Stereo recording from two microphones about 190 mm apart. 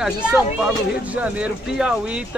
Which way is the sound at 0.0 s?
5° right (ahead or behind).